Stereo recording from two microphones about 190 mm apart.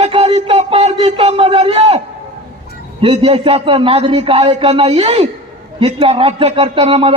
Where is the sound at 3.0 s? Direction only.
30° right (ahead or behind).